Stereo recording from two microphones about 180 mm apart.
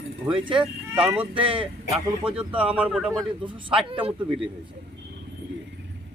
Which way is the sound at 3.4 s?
25° right (ahead or behind).